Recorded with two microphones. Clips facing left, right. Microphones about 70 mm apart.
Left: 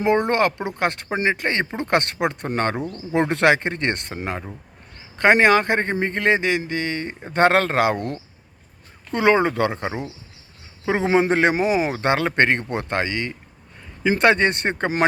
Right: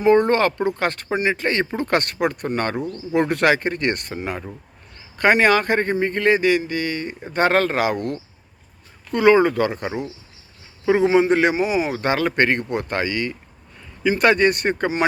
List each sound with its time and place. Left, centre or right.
0.0 s speech: left
11.5 s speech: left